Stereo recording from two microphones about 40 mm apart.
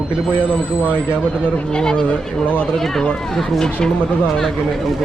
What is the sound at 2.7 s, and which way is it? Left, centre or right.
Speech, centre.